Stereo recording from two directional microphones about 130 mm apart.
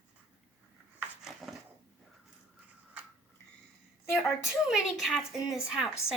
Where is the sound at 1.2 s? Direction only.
Centre (ahead or behind).